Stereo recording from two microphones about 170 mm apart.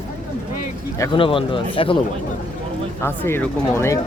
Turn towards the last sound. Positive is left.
turn(degrees=15)  # may be behind; listen again after turning